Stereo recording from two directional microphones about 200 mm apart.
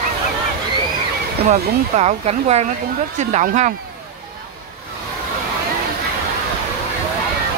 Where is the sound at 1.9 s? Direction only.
30° right (ahead or behind).